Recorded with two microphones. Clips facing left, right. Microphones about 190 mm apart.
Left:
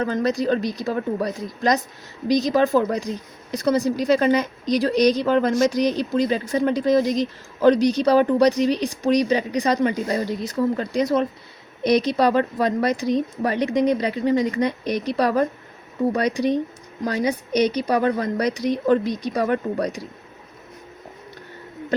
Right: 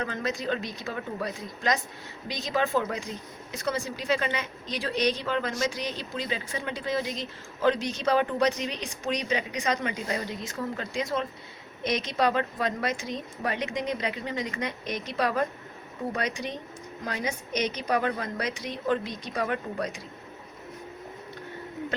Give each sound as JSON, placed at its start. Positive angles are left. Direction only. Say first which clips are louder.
{"t": 0.0, "sound": "speech", "louder": "left 9 dB", "side_deg": 35}